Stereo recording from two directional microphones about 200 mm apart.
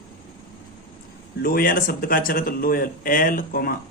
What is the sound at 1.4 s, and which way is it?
A man's voice, 45° left (ahead or behind).